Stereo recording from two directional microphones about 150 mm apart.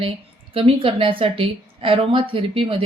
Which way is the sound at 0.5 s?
35° right (ahead or behind).